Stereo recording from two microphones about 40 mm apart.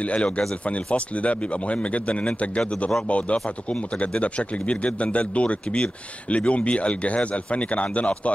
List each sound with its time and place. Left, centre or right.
0.0 s a man's voice: left